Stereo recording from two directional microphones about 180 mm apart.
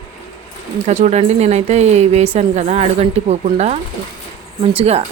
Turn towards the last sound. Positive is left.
turn(degrees=-35)  # may be behind; listen again after turning